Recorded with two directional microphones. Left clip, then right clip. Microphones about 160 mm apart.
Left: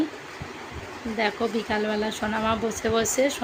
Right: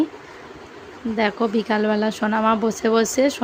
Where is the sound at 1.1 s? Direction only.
70° right (ahead or behind).